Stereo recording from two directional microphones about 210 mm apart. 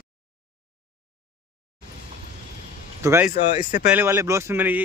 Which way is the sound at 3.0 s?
10° right (ahead or behind).